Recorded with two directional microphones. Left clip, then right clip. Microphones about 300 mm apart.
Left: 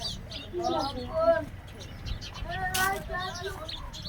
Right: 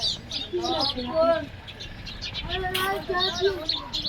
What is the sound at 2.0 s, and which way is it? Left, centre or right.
Bird, left.